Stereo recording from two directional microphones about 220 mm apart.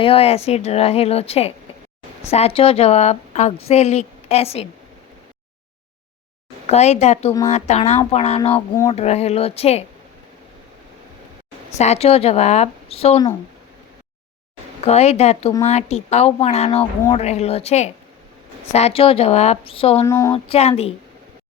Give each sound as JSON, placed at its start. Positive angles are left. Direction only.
{"t": 0.0, "sound": "a woman's voice", "side_deg": 25}
{"t": 6.7, "sound": "a woman's voice", "side_deg": 30}
{"t": 8.5, "sound": "speech", "side_deg": 15}
{"t": 9.0, "sound": "a woman's voice", "side_deg": 30}
{"t": 11.8, "sound": "a woman's voice", "side_deg": 30}
{"t": 14.8, "sound": "a woman's voice", "side_deg": 30}
{"t": 20.1, "sound": "speech", "side_deg": 10}
{"t": 20.3, "sound": "a woman's voice", "side_deg": 25}